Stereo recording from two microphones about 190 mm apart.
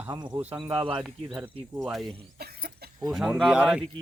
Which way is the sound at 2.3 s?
55° right (ahead or behind).